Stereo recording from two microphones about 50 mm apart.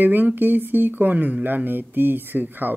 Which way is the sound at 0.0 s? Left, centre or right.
Right.